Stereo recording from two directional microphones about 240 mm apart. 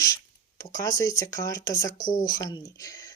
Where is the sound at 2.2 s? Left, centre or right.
Centre.